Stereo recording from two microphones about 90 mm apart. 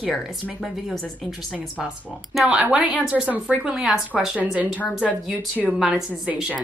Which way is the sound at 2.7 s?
15° right (ahead or behind).